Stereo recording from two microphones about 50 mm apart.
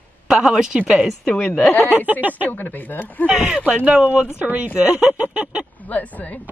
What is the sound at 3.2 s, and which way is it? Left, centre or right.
Speech, centre.